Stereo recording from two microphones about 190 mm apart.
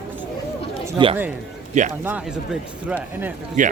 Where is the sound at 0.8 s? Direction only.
25° right (ahead or behind).